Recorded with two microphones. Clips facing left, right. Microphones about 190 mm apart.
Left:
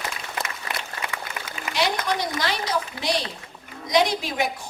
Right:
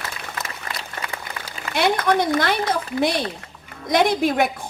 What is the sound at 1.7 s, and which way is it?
A woman's voice, 55° right (ahead or behind).